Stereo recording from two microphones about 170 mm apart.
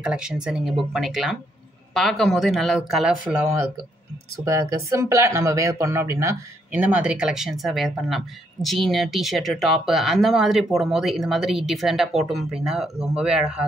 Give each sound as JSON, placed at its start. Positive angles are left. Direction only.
{"t": 0.0, "sound": "speech", "side_deg": -5}
{"t": 4.5, "sound": "speech", "side_deg": -15}